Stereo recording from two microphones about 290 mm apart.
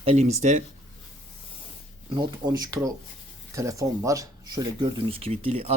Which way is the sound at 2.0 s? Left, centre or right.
Centre.